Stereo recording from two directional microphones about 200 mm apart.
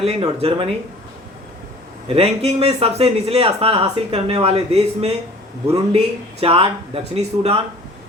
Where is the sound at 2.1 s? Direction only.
30° right (ahead or behind).